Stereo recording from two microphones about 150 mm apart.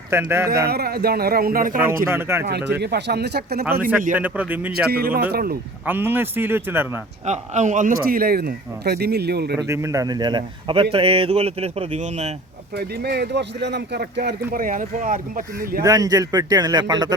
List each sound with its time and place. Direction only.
0.1 s speech: 15° right (ahead or behind)
0.7 s a man's voice: 90° right; by 1.8 s 70° right (ahead or behind)
2.0 s speech: 15° right (ahead or behind)
2.8 s a man's voice: 90° right
3.7 s speech: 15° right (ahead or behind)
4.9 s a man's voice: 90° right
5.8 s speech: 15° right (ahead or behind)
7.3 s a man's voice: 55° right (ahead or behind); by 9.6 s 90° right
9.6 s speech: 20° right (ahead or behind); by 12.3 s 50° right (ahead or behind)
12.7 s a man's voice: 90° right; by 15.4 s 65° right (ahead or behind)
15.8 s speech: 25° right (ahead or behind)